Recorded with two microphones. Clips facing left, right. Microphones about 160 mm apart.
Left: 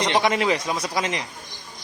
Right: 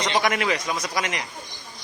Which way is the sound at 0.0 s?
25° left (ahead or behind).